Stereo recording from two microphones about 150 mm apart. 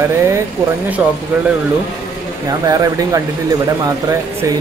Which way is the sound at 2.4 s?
25° right (ahead or behind).